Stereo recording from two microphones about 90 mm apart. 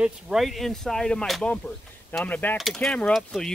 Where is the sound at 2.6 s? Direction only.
Centre (ahead or behind).